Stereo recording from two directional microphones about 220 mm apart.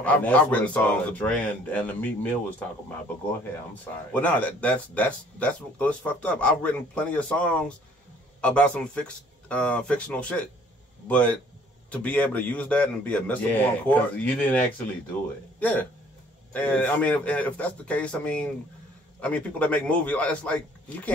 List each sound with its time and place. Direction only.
0.0 s speech: 5° left (ahead or behind)
4.1 s a man's voice: 5° left (ahead or behind)
15.6 s a man's voice: 5° left (ahead or behind)